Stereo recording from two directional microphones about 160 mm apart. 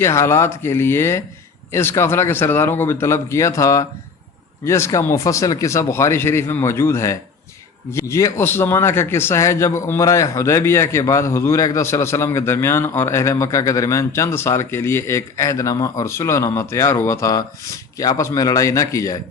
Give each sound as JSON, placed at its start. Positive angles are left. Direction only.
{"t": 0.0, "sound": "speech", "side_deg": 15}